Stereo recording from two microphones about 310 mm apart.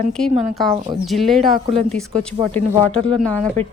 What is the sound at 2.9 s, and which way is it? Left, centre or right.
Speech, centre.